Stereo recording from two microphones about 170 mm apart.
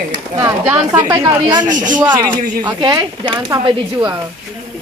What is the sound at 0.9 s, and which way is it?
Speech, 20° right (ahead or behind).